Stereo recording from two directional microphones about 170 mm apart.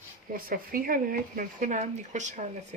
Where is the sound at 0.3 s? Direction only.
55° right (ahead or behind).